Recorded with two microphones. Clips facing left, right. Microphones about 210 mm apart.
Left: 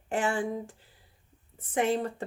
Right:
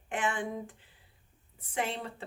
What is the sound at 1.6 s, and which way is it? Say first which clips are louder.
Speech: left 8 dB; 50° left (ahead or behind).